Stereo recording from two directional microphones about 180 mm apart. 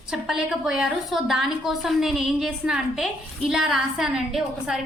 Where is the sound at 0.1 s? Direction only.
5° right (ahead or behind).